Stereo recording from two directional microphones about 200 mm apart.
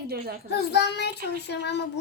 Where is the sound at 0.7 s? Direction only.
55° left (ahead or behind).